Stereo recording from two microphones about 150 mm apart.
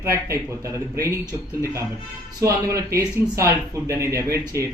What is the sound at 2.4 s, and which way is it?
Speech, 20° right (ahead or behind).